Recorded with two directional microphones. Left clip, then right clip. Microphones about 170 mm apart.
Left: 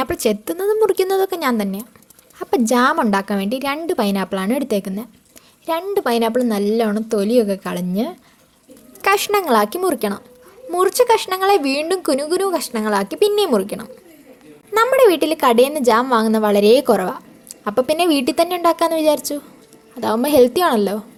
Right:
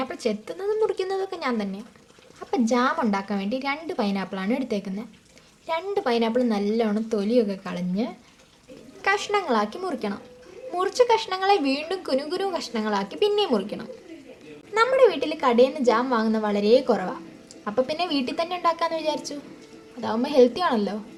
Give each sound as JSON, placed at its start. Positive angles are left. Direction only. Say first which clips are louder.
{"t": 0.0, "sound": "a woman's voice", "louder": "left 8 dB", "side_deg": 55}
{"t": 14.7, "sound": "a woman's voice", "louder": "left 6 dB", "side_deg": 60}